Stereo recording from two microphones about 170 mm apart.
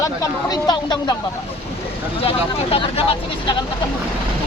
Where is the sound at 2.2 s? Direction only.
35° left (ahead or behind).